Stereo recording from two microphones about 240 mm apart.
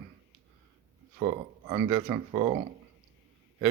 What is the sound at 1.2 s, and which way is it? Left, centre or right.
Speech, centre.